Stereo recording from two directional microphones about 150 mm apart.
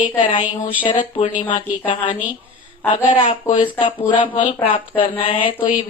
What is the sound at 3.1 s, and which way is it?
Speech, 35° left (ahead or behind).